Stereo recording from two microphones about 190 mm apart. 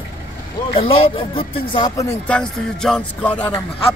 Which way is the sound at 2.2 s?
5° left (ahead or behind).